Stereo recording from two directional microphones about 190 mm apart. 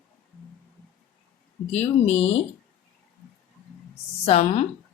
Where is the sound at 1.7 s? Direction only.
35° left (ahead or behind).